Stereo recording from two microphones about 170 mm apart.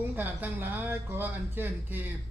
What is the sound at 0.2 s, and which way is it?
Speech, 10° right (ahead or behind).